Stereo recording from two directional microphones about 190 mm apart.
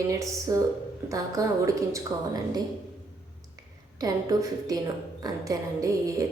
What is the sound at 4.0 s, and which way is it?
A woman's voice, 20° right (ahead or behind).